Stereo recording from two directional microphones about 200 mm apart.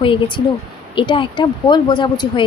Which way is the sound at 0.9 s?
25° left (ahead or behind).